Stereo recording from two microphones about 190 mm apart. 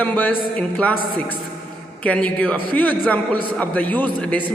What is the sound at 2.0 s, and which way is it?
A man's voice, 5° left (ahead or behind).